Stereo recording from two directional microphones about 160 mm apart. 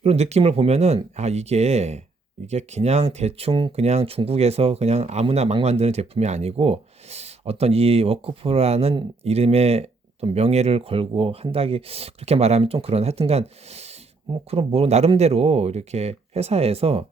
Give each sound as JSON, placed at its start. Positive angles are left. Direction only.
{"t": 0.0, "sound": "speech", "side_deg": -40}